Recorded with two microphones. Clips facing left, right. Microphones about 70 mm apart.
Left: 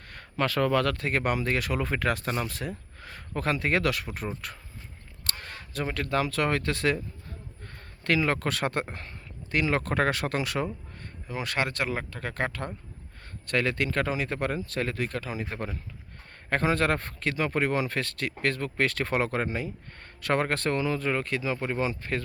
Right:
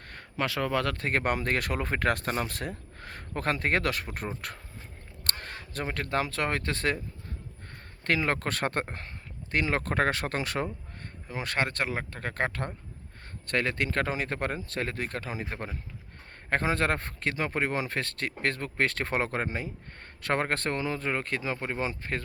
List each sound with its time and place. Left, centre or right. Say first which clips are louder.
0.3 s speech: left 4 dB; centre; by 4.6 s right
5.2 s speech: right 1 dB; right
8.0 s speech: left 2 dB; right